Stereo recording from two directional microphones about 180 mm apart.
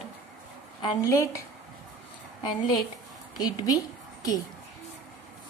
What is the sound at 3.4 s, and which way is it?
Speech, 20° left (ahead or behind).